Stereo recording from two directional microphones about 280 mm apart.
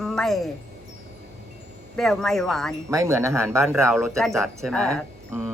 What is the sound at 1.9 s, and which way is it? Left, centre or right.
Speech, centre.